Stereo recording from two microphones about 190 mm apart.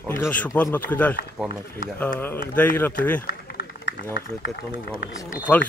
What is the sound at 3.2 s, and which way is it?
Run, 50° left (ahead or behind).